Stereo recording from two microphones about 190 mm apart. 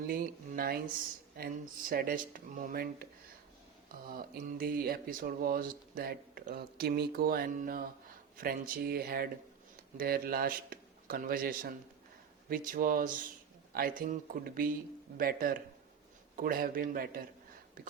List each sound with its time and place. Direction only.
0.1 s speech: 50° right (ahead or behind)
4.1 s speech: 50° right (ahead or behind)